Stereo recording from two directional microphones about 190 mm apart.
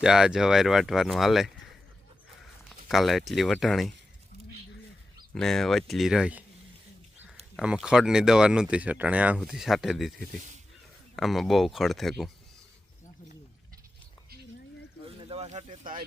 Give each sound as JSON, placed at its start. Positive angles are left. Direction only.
{"t": 0.0, "sound": "speech", "side_deg": -5}
{"t": 2.9, "sound": "speech", "side_deg": 0}
{"t": 5.3, "sound": "speech", "side_deg": 5}
{"t": 7.5, "sound": "speech", "side_deg": -5}
{"t": 15.2, "sound": "a sound", "side_deg": -30}